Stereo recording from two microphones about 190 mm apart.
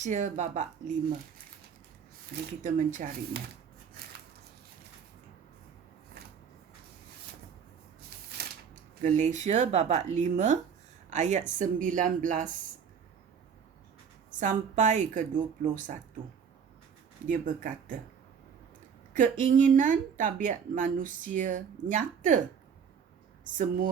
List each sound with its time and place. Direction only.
0.0 s speech: 40° right (ahead or behind)
2.6 s speech: 40° right (ahead or behind)
9.0 s speech: 40° right (ahead or behind)
14.3 s speech: 45° right (ahead or behind)
17.2 s speech: 45° right (ahead or behind)
19.1 s speech: 45° right (ahead or behind)
23.6 s speech: 45° right (ahead or behind)